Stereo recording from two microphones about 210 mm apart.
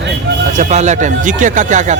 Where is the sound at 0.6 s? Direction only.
35° right (ahead or behind).